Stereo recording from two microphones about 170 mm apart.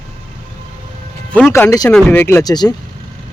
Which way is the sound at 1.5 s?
15° left (ahead or behind).